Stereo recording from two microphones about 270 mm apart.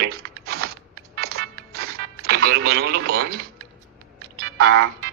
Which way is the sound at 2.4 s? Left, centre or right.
Right.